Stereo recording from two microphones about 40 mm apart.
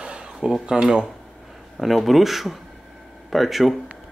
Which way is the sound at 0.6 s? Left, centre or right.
Centre.